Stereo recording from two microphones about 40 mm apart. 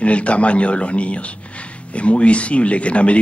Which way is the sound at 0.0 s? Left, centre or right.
Left.